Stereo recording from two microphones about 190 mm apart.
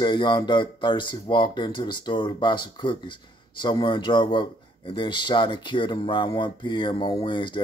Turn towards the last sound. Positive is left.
turn(degrees=25)  # may be behind; listen again after turning